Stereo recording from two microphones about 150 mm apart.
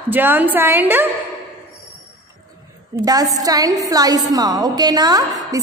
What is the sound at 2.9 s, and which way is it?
A woman's voice, 25° right (ahead or behind).